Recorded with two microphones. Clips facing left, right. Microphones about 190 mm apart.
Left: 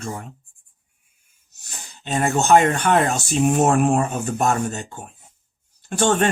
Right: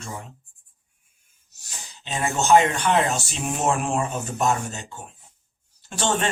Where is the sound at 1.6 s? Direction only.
50° left (ahead or behind).